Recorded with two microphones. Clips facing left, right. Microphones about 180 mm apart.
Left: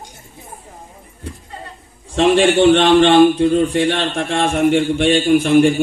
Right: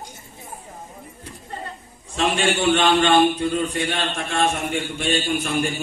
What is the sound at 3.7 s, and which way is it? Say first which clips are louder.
A man's voice: left 8 dB; 75° left (ahead or behind).